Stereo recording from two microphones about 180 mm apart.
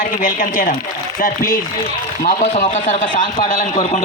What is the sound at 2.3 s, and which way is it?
A man's voice, 35° left (ahead or behind).